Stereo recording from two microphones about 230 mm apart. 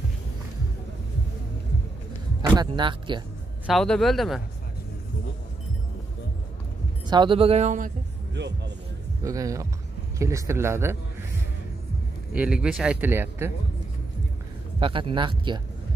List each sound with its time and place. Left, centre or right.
2.4 s speech: centre
3.6 s speech: centre
7.1 s speech: right
8.4 s speech: right
9.2 s a man's voice: centre
12.4 s speech: centre
14.8 s speech: right